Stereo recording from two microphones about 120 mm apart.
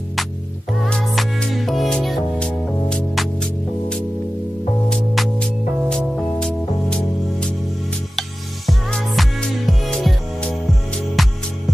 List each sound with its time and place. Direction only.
0.8 s music: centre (ahead or behind)
4.8 s music: 5° left (ahead or behind)